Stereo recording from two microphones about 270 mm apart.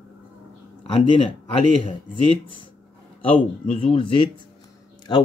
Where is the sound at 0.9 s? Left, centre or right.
Centre.